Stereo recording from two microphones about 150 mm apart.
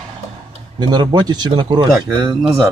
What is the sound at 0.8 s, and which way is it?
Speech, 30° right (ahead or behind).